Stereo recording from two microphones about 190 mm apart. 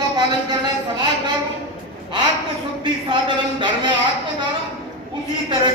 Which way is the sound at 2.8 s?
25° right (ahead or behind).